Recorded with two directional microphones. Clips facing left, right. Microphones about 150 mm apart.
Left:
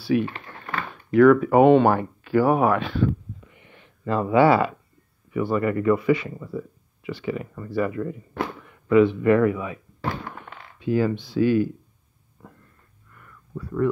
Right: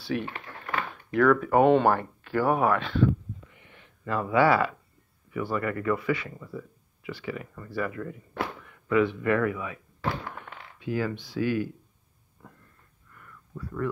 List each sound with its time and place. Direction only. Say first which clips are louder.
0.0 s speech: left 8 dB; 5° left (ahead or behind)
3.7 s speech: left 5 dB; 30° left (ahead or behind)
10.8 s speech: left 7 dB; 30° left (ahead or behind)
12.4 s a sound: left 4 dB; 20° left (ahead or behind)